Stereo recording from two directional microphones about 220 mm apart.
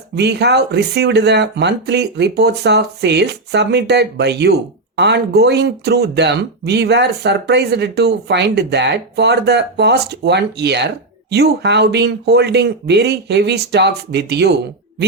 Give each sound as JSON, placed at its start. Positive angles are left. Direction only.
{"t": 0.2, "sound": "speech", "side_deg": -50}